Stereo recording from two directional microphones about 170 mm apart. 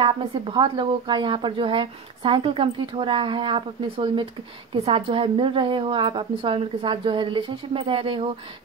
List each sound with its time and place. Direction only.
0.0 s a woman's voice: 30° right (ahead or behind)